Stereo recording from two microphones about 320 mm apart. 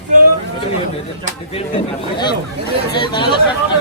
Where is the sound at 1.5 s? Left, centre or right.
Centre.